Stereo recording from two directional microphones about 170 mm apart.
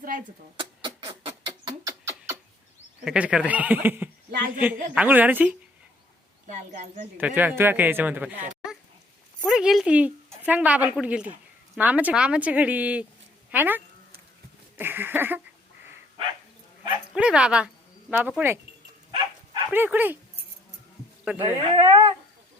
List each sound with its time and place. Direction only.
0.5 s rodents: 30° right (ahead or behind)
3.0 s speech: 5° right (ahead or behind)
4.3 s a woman's voice: 60° right (ahead or behind)
4.5 s speech: 10° right (ahead or behind)
6.5 s a woman's voice: 50° right (ahead or behind)
7.2 s speech: 10° right (ahead or behind)
9.4 s speech: 5° right (ahead or behind)
17.2 s speech: 5° right (ahead or behind)
19.7 s speech: 10° right (ahead or behind)
21.3 s speech: 25° right (ahead or behind)